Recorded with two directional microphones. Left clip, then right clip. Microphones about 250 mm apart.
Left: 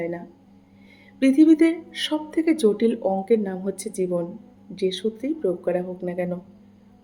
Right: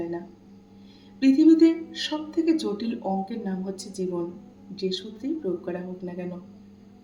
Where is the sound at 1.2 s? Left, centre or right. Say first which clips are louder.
Left 1 dB; left.